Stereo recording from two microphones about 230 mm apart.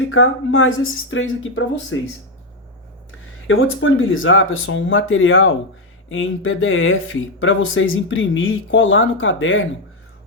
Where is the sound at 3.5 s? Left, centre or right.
Left.